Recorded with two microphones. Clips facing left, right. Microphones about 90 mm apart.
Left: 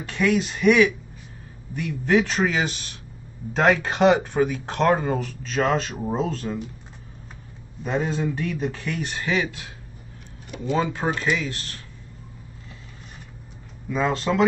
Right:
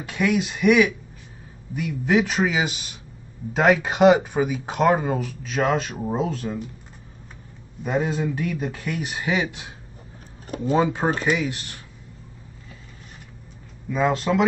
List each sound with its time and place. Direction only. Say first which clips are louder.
0.0 s speech: even; 10° right (ahead or behind)
7.8 s speech: right 1 dB; 5° right (ahead or behind)
13.8 s speech: right 2 dB; 5° right (ahead or behind)